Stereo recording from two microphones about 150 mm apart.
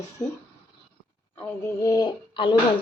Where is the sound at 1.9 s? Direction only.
30° left (ahead or behind).